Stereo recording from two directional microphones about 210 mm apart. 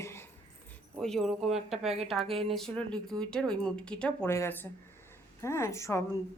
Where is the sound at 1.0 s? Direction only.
Centre (ahead or behind).